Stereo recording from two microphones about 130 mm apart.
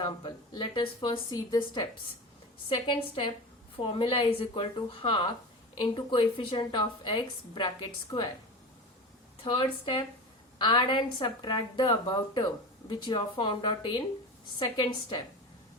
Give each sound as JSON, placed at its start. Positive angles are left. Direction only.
{"t": 0.0, "sound": "a woman's voice", "side_deg": 35}
{"t": 2.6, "sound": "a woman's voice", "side_deg": 40}
{"t": 9.4, "sound": "a woman's voice", "side_deg": 40}